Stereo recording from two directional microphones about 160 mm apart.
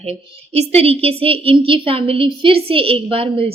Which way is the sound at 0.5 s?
40° right (ahead or behind).